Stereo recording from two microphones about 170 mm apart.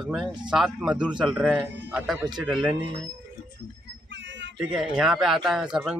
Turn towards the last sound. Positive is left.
turn(degrees=-5)  # may be behind; listen again after turning